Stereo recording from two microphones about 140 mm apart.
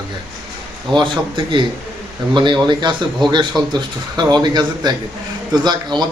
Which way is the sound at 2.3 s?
35° right (ahead or behind).